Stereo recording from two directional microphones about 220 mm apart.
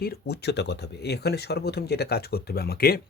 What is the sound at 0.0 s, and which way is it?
Speech, 45° left (ahead or behind).